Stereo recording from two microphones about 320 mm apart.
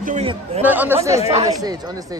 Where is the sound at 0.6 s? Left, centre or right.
Centre.